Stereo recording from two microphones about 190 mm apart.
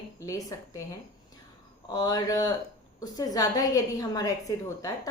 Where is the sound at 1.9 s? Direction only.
20° left (ahead or behind).